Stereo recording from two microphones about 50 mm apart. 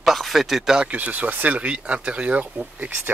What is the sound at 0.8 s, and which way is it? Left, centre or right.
Speech, right.